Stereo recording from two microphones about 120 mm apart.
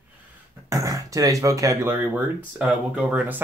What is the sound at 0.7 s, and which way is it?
Speech, 30° right (ahead or behind).